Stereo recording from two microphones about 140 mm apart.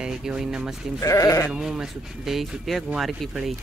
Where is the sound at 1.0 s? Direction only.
20° left (ahead or behind).